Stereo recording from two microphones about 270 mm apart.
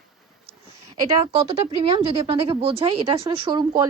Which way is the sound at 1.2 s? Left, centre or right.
Right.